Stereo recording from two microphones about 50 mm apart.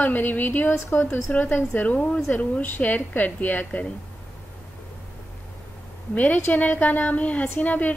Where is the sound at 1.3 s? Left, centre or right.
Left.